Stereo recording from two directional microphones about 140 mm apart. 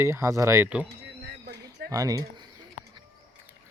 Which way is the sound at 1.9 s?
25° right (ahead or behind).